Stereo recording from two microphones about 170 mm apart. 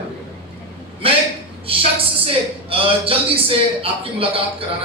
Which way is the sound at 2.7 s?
35° right (ahead or behind).